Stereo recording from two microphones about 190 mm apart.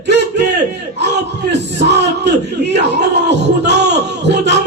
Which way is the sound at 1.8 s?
65° right (ahead or behind).